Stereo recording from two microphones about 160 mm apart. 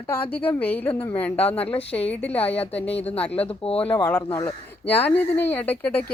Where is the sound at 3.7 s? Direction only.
10° left (ahead or behind).